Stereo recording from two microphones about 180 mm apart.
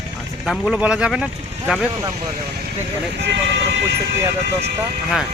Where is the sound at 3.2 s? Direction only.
80° right.